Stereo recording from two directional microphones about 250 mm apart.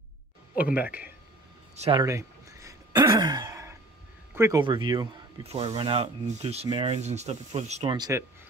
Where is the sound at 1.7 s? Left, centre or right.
Right.